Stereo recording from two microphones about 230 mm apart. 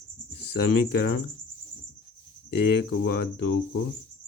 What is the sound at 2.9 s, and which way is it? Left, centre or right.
Speech, left.